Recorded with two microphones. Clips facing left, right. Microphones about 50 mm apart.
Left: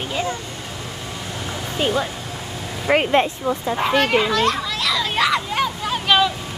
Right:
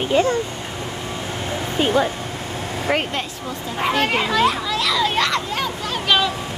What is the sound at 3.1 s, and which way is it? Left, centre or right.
Speech, left.